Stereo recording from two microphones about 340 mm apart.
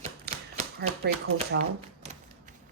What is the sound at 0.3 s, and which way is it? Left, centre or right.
Typewriter, right.